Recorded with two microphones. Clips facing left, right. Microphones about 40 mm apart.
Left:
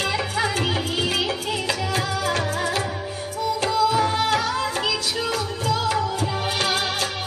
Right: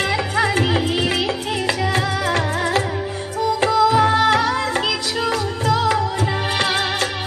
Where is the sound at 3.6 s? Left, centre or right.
Right.